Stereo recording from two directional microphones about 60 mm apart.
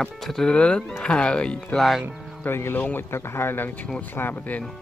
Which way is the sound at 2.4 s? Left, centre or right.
Left.